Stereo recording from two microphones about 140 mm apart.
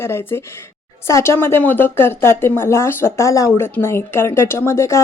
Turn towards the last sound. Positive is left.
turn(degrees=20)  # may be behind; listen again after turning